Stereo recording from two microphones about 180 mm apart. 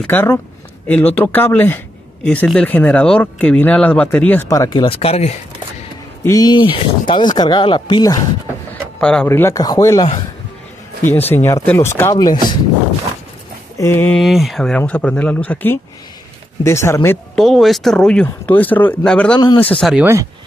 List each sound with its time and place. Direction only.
0.0 s speech: 10° left (ahead or behind); by 5.3 s 35° left (ahead or behind)
6.2 s speech: 20° left (ahead or behind)
9.0 s speech: 5° left (ahead or behind)
11.1 s speech: 10° left (ahead or behind)
13.7 s speech: 15° left (ahead or behind)
14.2 s speech: centre (ahead or behind); by 17.2 s 15° left (ahead or behind)
17.4 s speech: centre (ahead or behind)
19.3 s speech: 25° left (ahead or behind)
19.8 s speech: centre (ahead or behind)